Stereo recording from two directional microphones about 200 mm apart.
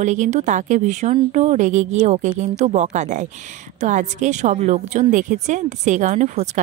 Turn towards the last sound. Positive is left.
turn(degrees=-35)  # may be behind; listen again after turning